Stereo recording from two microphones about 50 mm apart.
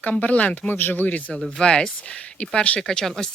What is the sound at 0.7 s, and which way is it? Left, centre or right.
Speech, left.